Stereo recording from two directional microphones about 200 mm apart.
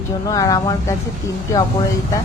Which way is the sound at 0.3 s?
20° left (ahead or behind).